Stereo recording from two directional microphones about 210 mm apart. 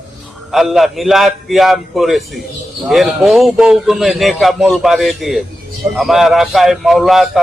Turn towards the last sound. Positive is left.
turn(degrees=0)  # may be behind; listen again after turning